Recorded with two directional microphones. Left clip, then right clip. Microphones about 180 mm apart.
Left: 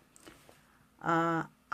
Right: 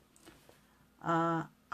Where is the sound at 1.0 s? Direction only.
35° left (ahead or behind).